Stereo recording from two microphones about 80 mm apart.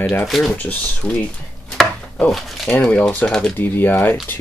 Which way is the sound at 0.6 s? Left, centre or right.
Left.